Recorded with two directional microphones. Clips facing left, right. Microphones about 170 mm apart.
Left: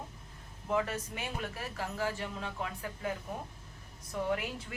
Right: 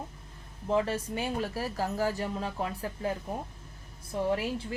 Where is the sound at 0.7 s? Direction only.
30° right (ahead or behind).